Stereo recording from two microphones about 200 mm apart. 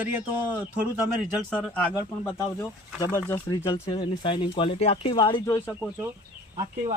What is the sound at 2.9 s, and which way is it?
Speech, 20° left (ahead or behind).